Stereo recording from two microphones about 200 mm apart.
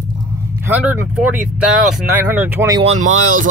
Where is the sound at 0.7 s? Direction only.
10° right (ahead or behind).